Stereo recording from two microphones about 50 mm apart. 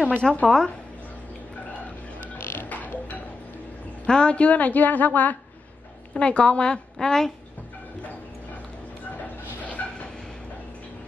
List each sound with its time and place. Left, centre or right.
0.2 s a woman's voice: left
2.3 s music: left
4.0 s a woman's voice: left
6.1 s a woman's voice: left
9.8 s vehicle: left